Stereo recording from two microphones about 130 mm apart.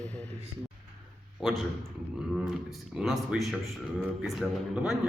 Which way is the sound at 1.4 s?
Centre (ahead or behind).